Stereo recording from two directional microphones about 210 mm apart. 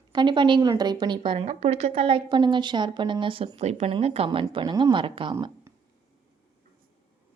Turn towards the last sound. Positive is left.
turn(degrees=-15)  # may be behind; listen again after turning